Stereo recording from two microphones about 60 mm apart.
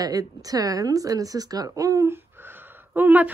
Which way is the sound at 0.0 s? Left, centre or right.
Right.